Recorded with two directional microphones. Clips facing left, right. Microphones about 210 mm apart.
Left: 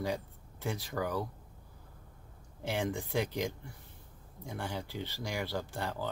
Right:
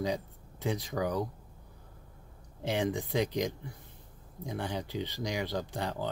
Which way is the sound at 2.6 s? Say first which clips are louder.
Right 3 dB; 15° right (ahead or behind).